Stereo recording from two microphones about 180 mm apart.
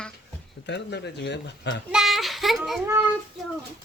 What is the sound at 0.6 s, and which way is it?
Speech, 70° left (ahead or behind).